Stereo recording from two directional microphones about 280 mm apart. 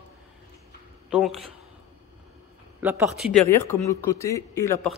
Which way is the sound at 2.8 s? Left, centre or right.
Centre.